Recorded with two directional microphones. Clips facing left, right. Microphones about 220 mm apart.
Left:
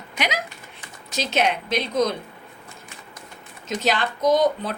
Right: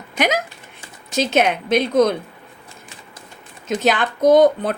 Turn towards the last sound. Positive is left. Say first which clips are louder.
# right 7 dB
turn(degrees=-55)  # may be behind; listen again after turning